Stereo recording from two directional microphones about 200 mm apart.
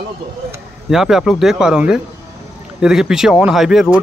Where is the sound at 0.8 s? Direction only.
Centre (ahead or behind).